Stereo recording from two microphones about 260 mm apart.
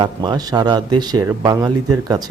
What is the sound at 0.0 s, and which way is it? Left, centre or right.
Speech, centre.